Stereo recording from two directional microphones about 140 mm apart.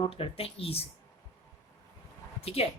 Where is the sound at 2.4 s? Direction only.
45° left (ahead or behind).